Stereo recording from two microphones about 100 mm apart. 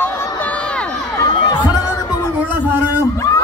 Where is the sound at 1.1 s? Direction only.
45° left (ahead or behind).